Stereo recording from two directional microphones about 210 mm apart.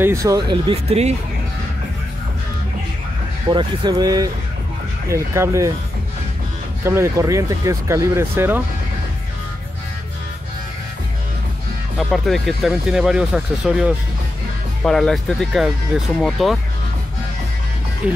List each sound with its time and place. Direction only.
0.0 s speech: 15° right (ahead or behind); by 1.1 s 30° right (ahead or behind)
3.4 s speech: 20° right (ahead or behind)
6.8 s speech: 10° right (ahead or behind)
12.0 s speech: centre (ahead or behind)
18.0 s speech: 5° right (ahead or behind)